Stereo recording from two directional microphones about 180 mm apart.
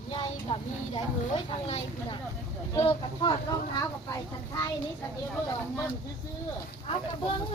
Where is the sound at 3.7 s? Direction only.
20° left (ahead or behind).